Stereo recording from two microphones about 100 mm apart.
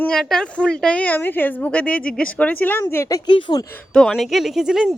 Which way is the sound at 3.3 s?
55° left (ahead or behind).